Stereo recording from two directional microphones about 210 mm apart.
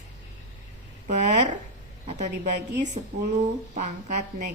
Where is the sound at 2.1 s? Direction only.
35° right (ahead or behind).